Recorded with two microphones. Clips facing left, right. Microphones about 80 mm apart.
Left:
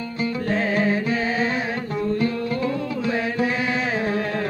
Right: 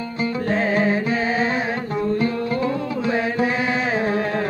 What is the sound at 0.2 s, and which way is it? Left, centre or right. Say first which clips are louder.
Music: right 2 dB; right.